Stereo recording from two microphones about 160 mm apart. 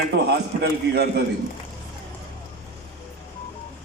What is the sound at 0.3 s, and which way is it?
Speech, 90° right.